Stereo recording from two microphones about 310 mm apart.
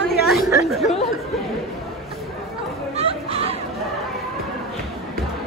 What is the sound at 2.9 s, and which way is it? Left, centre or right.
Chatter, centre.